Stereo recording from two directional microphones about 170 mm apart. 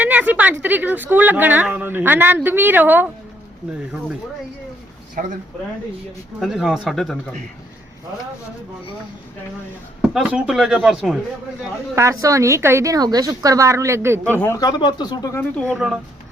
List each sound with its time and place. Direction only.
0.0 s speech: 10° right (ahead or behind)
5.2 s speech: 55° right (ahead or behind)
6.4 s speech: 5° right (ahead or behind)
10.0 s speech: 5° right (ahead or behind)
11.9 s speech: 20° right (ahead or behind)
14.3 s speech: 10° left (ahead or behind)
14.6 s speech: 25° left (ahead or behind)
15.6 s speech: 5° right (ahead or behind)